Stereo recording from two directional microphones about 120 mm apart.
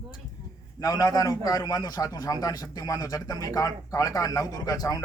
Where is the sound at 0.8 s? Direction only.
30° left (ahead or behind).